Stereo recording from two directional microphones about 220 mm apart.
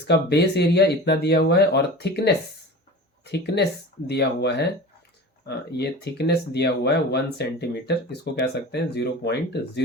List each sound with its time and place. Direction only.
0.1 s speech: 50° left (ahead or behind)
3.3 s speech: 50° left (ahead or behind)